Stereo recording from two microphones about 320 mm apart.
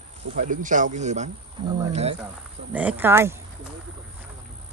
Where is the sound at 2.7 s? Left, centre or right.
Centre.